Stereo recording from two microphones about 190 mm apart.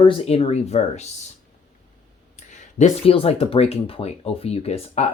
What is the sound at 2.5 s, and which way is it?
Speech, 35° left (ahead or behind).